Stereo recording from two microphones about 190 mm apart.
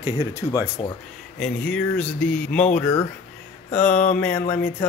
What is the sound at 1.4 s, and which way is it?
Speech, 5° left (ahead or behind).